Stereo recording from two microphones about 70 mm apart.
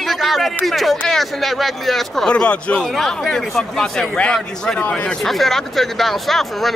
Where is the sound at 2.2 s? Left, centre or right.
Centre.